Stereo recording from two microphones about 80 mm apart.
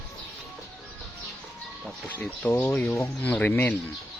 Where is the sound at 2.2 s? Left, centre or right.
Left.